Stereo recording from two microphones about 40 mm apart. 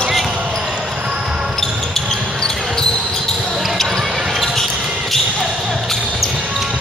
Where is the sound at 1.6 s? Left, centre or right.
Centre.